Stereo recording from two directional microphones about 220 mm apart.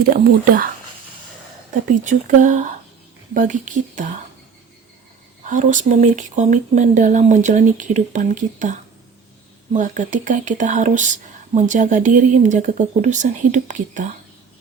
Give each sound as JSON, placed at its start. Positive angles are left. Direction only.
{"t": 0.1, "sound": "speech", "side_deg": -40}
{"t": 2.0, "sound": "speech", "side_deg": -35}
{"t": 5.5, "sound": "speech", "side_deg": -35}